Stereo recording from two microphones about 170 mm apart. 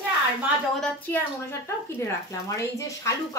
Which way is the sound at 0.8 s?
15° left (ahead or behind).